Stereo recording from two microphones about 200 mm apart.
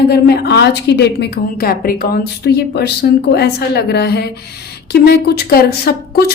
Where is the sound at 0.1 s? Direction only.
55° left (ahead or behind).